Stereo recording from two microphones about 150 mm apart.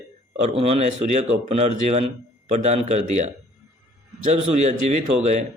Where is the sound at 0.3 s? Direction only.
45° right (ahead or behind).